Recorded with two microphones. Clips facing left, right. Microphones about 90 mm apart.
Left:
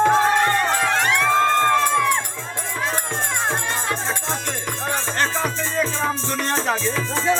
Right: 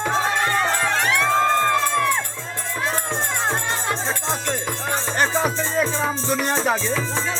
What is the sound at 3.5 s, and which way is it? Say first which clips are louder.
Music: even; 15° right (ahead or behind).